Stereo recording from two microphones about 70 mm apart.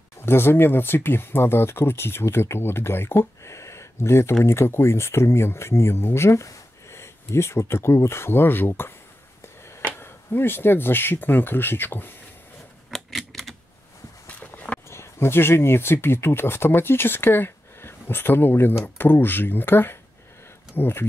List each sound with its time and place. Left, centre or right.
0.2 s speech: left
9.9 s speech: left
12.9 s typewriter: centre
14.2 s a sound: left
14.9 s speech: left